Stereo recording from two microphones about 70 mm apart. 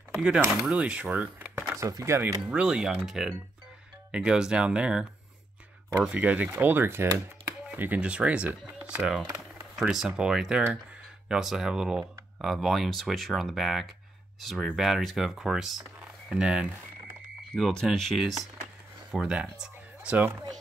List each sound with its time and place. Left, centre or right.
0.1 s speech: centre
1.8 s speech: right
2.0 s speech: right
2.4 s speech: centre; by 7.1 s right
8.0 s speech: centre
9.2 s a sound: right
9.8 s speech: centre
17.5 s speech: centre
19.5 s a sound: centre